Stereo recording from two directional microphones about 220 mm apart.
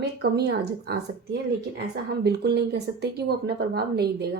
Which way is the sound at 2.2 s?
50° right (ahead or behind).